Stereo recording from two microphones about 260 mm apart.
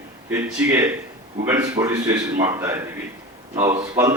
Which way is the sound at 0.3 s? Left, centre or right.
Centre.